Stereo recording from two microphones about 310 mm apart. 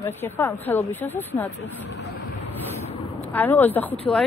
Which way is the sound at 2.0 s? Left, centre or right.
Left.